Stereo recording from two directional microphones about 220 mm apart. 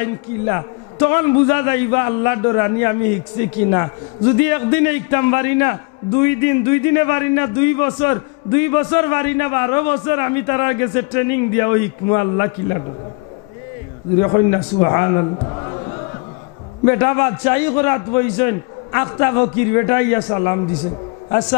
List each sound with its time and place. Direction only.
0.0 s a man's voice: 15° left (ahead or behind)
4.4 s a man's voice: 10° left (ahead or behind)
14.2 s a man's voice: 20° left (ahead or behind)
16.8 s a man's voice: 15° left (ahead or behind)